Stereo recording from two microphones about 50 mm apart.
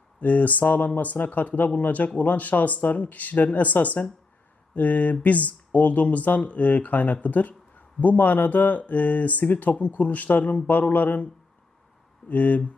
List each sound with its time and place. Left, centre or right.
0.2 s speech: left
4.7 s mantra: left
5.2 s speech: left
12.3 s speech: left